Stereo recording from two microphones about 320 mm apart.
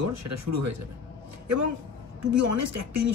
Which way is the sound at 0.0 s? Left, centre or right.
Right.